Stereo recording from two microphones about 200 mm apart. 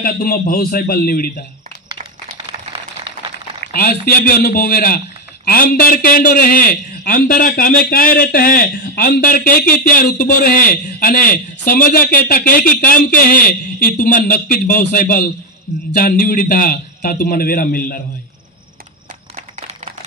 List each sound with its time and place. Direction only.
0.0 s a man's voice: 45° left (ahead or behind)
3.6 s a man's voice: 50° left (ahead or behind)